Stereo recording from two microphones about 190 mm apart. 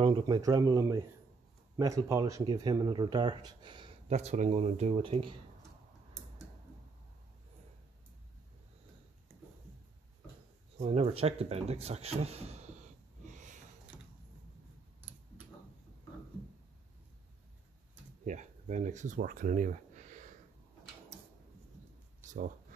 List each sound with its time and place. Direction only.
0.0 s speech: 25° right (ahead or behind)
4.1 s a man's voice: 35° right (ahead or behind)
10.8 s a man's voice: 35° right (ahead or behind)
13.2 s snort: 40° right (ahead or behind)
15.0 s tick-tock: 10° right (ahead or behind)
18.2 s speech: 40° right (ahead or behind)